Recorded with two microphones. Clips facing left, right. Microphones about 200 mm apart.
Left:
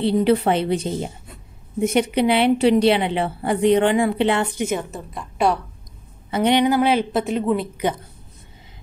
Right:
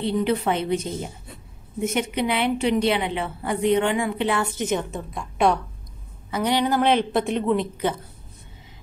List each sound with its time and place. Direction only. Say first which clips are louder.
0.0 s a woman's voice: left 5 dB; 30° left (ahead or behind)
4.6 s a woman's voice: left 1 dB; 5° left (ahead or behind)
6.3 s speech: left 5 dB; 25° left (ahead or behind)
6.6 s a woman's voice: left 3 dB; 10° left (ahead or behind)